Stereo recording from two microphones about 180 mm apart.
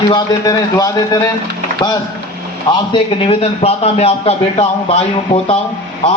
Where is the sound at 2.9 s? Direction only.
30° left (ahead or behind).